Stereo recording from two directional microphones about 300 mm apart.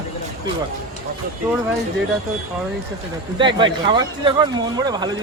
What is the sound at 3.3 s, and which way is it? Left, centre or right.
Speech, centre.